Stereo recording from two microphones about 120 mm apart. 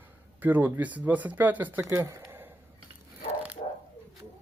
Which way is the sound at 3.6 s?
90° left.